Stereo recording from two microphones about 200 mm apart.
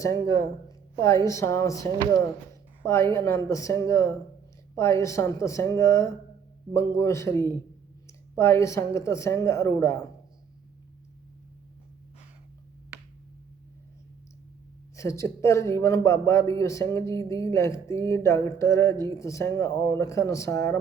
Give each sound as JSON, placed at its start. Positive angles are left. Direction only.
{"t": 0.0, "sound": "speech", "side_deg": 15}
{"t": 2.8, "sound": "speech", "side_deg": 15}
{"t": 14.9, "sound": "speech", "side_deg": 15}